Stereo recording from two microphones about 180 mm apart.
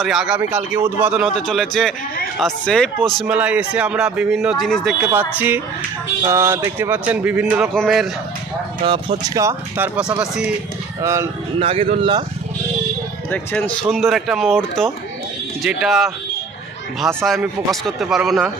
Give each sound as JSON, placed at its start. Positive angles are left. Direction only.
{"t": 0.0, "sound": "speech", "side_deg": -5}
{"t": 6.2, "sound": "speech", "side_deg": -15}
{"t": 8.8, "sound": "speech", "side_deg": -30}
{"t": 9.3, "sound": "speech", "side_deg": -15}
{"t": 11.6, "sound": "speech", "side_deg": -30}
{"t": 13.3, "sound": "a man's voice", "side_deg": 10}
{"t": 13.8, "sound": "speech", "side_deg": 0}